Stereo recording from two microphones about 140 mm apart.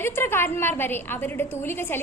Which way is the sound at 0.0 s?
15° left (ahead or behind).